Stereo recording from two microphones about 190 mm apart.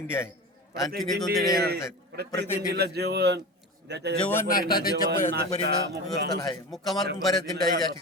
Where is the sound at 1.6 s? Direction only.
55° right (ahead or behind).